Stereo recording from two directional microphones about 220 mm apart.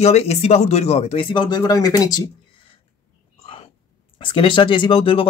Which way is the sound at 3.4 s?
25° left (ahead or behind).